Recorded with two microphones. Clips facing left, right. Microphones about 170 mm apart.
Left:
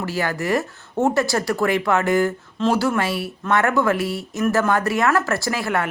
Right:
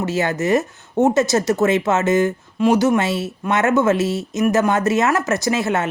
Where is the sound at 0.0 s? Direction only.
20° right (ahead or behind).